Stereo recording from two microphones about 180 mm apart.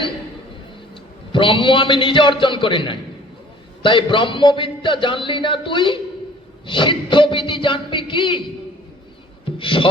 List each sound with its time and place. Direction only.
1.3 s a man's voice: 30° left (ahead or behind)
6.7 s a sound: 25° left (ahead or behind)
9.6 s music: 30° left (ahead or behind)